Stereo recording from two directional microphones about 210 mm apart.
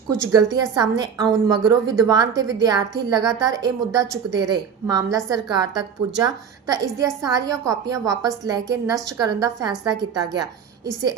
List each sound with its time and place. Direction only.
0.3 s a woman's voice: 15° right (ahead or behind)